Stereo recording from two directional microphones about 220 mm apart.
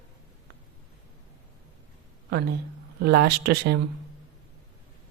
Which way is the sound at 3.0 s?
45° right (ahead or behind).